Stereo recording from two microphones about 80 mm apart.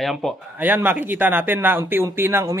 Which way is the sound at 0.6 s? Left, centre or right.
Right.